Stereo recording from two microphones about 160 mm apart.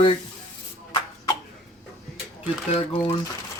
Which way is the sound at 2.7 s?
40° left (ahead or behind).